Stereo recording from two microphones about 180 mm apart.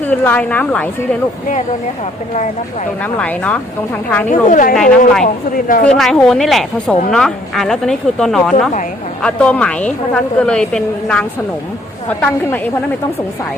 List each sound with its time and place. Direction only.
0.0 s a woman's voice: 10° left (ahead or behind)
2.3 s speech: 40° left (ahead or behind)
3.0 s a woman's voice: 10° left (ahead or behind)
4.3 s a woman's voice: 50° left (ahead or behind)
4.7 s a woman's voice: 5° left (ahead or behind)
5.2 s a woman's voice: 50° left (ahead or behind)
5.8 s a woman's voice: 5° left (ahead or behind)